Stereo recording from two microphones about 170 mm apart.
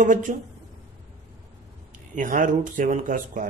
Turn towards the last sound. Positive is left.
turn(degrees=-50)  # may be behind; listen again after turning